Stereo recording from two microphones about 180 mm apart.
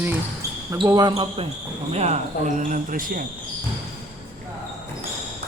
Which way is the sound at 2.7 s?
50° right (ahead or behind).